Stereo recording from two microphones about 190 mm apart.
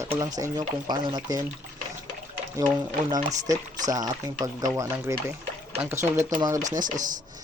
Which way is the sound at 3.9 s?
20° right (ahead or behind).